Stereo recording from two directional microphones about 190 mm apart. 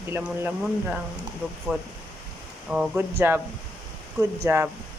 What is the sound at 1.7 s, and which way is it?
A woman's voice, 10° right (ahead or behind).